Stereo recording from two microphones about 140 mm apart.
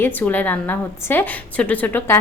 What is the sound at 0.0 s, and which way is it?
A woman's voice, 15° left (ahead or behind).